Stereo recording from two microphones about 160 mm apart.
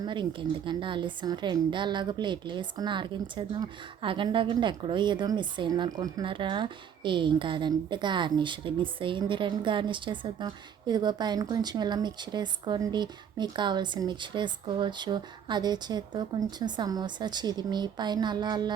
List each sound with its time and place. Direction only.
0.0 s a woman's voice: 30° right (ahead or behind)